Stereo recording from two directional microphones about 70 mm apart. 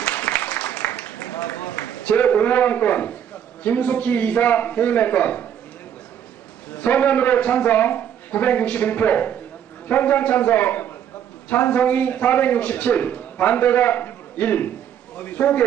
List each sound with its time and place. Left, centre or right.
0.0 s a sound: left
2.0 s a man's voice: left
6.7 s a man's voice: left